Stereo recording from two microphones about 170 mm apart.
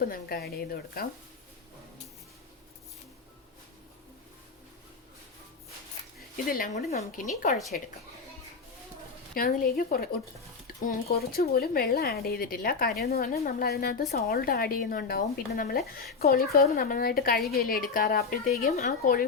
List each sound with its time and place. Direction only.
0.0 s speech: 60° left (ahead or behind)
6.3 s a woman's voice: 55° left (ahead or behind)
9.3 s speech: 60° left (ahead or behind)